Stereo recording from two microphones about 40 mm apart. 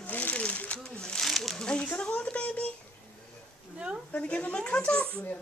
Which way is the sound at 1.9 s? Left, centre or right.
Left.